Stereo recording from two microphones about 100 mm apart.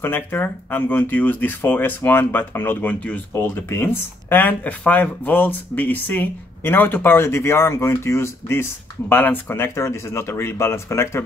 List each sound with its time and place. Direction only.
0.0 s speech: 20° left (ahead or behind)